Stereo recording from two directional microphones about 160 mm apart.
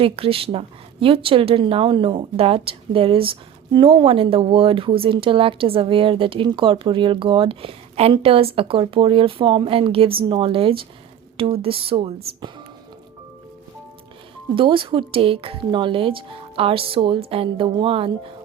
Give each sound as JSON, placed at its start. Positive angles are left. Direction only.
{"t": 0.0, "sound": "speech", "side_deg": -35}
{"t": 14.5, "sound": "speech", "side_deg": -30}